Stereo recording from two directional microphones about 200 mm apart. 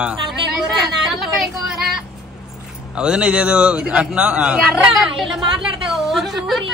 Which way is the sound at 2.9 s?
5° right (ahead or behind).